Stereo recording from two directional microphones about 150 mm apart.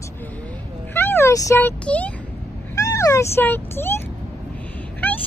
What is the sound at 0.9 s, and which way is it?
Speech, 15° left (ahead or behind).